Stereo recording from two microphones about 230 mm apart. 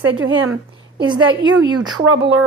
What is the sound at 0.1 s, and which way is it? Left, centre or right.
Speech, right.